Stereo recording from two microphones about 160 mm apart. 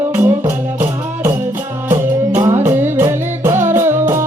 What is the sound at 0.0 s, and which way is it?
Music, 10° right (ahead or behind).